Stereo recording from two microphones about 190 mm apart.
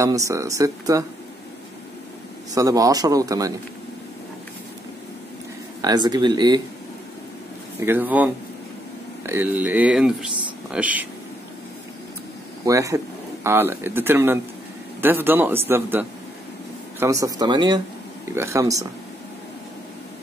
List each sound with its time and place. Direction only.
0.0 s speech: 15° right (ahead or behind)
2.5 s a man's voice: 20° right (ahead or behind)
5.8 s a man's voice: 20° right (ahead or behind)
7.8 s speech: 10° right (ahead or behind)
12.6 s a man's voice: 15° right (ahead or behind)